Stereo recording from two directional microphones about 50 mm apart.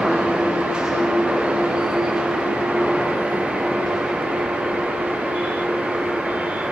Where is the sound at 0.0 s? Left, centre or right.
Centre.